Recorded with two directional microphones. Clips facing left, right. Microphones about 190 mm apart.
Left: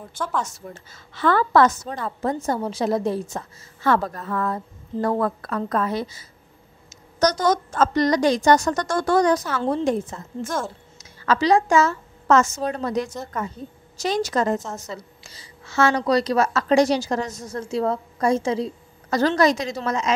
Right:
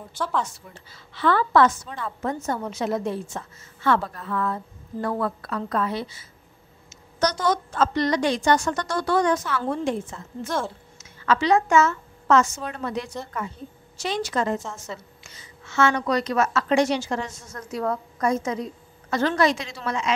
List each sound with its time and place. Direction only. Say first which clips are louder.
0.5 s a woman's voice: left 7 dB; 45° left (ahead or behind)